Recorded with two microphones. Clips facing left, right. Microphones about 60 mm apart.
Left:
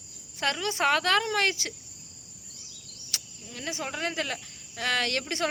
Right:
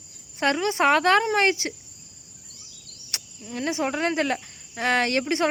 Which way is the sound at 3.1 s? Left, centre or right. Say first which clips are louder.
Right 7 dB; right.